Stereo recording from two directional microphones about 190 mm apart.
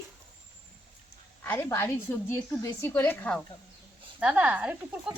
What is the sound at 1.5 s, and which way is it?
Speech, 15° left (ahead or behind).